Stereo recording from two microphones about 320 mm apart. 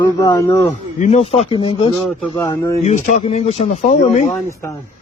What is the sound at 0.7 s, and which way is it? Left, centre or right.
Speech, left.